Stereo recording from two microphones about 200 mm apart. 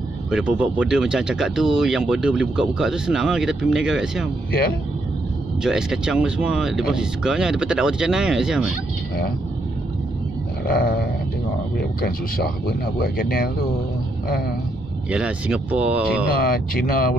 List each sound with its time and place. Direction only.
0.3 s speech: 5° right (ahead or behind)
4.5 s speech: 50° left (ahead or behind)
5.6 s speech: 5° right (ahead or behind)
10.7 s speech: 50° left (ahead or behind)
15.0 s speech: 5° right (ahead or behind)
16.3 s speech: 45° left (ahead or behind)